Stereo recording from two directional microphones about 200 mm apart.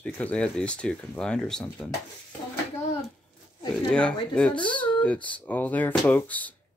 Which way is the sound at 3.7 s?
5° left (ahead or behind).